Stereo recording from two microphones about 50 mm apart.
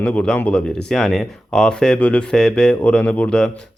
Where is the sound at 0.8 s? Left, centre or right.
Centre.